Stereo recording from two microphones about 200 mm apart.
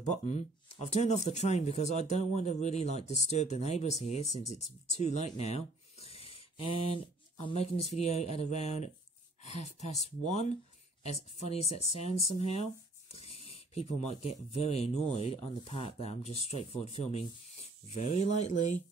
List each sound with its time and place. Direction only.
0.1 s speech: 35° left (ahead or behind)